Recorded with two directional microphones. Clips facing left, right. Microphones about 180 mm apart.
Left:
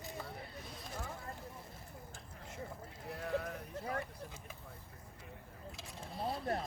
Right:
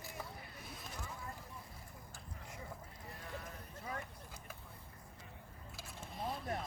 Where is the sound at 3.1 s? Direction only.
65° left (ahead or behind).